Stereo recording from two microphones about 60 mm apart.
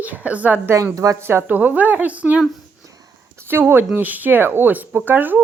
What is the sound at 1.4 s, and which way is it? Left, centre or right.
Speech, right.